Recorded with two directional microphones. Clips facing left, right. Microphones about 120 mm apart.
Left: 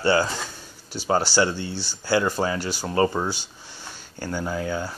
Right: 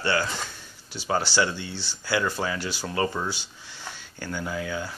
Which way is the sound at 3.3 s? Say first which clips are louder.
Left 2 dB; 45° left (ahead or behind).